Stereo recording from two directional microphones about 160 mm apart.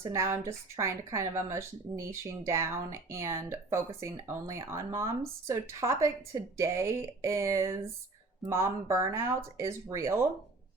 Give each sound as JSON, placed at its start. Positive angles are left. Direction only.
{"t": 0.0, "sound": "speech", "side_deg": -20}